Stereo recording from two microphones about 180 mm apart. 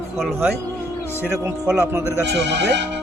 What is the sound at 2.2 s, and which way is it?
Speech, 70° right (ahead or behind).